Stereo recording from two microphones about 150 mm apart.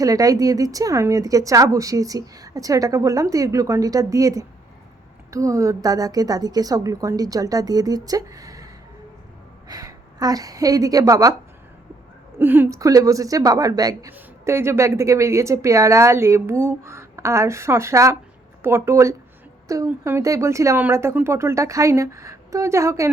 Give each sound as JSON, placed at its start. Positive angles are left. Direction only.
{"t": 0.0, "sound": "a woman's voice", "side_deg": -25}
{"t": 12.4, "sound": "a woman's voice", "side_deg": -15}